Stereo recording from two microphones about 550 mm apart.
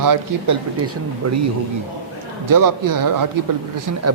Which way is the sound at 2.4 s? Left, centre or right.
Right.